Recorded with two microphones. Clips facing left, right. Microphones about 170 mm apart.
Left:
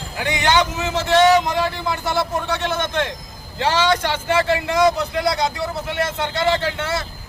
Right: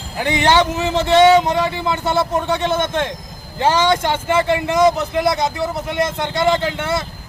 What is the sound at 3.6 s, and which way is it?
A man's voice, 20° right (ahead or behind).